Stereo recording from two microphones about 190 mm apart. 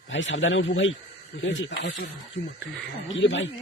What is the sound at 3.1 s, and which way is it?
Speech, 75° left (ahead or behind).